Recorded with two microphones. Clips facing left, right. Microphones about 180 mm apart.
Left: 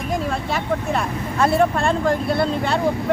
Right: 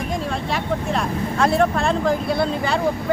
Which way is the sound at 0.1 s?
5° left (ahead or behind).